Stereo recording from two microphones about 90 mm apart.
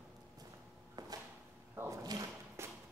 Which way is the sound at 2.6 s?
30° right (ahead or behind).